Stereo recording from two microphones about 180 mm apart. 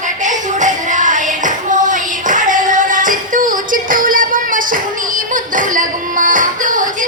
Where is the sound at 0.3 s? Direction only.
45° right (ahead or behind).